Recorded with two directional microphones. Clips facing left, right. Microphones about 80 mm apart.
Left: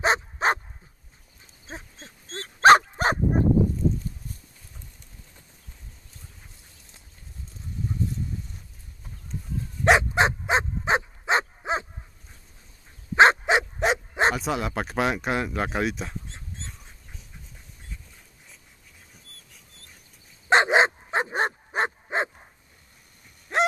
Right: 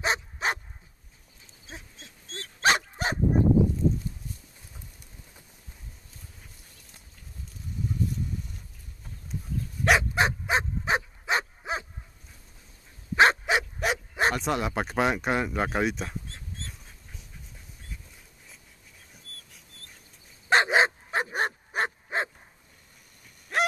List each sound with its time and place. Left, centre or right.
0.0 s dog: left
1.7 s dog: left
9.3 s dog: centre
9.8 s dog: left
13.1 s dog: left
14.3 s speech: centre
16.3 s dog: left
20.4 s dog: left
23.5 s a sound: left